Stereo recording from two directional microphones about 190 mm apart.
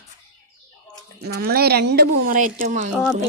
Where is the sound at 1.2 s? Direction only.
55° right (ahead or behind); by 2.9 s 40° right (ahead or behind).